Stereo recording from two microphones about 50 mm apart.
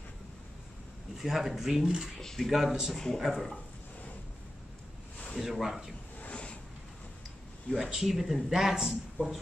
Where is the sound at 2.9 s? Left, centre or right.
Centre.